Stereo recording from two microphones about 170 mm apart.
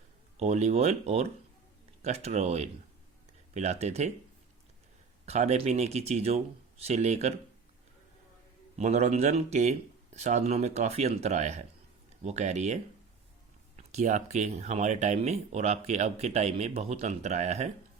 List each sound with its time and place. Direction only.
0.3 s speech: 40° right (ahead or behind)
5.2 s speech: 40° right (ahead or behind)
8.7 s speech: 40° right (ahead or behind)